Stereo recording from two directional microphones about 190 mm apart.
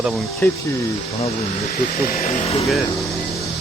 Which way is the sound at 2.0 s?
40° left (ahead or behind).